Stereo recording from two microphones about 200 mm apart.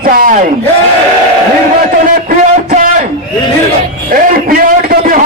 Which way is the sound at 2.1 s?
45° right (ahead or behind).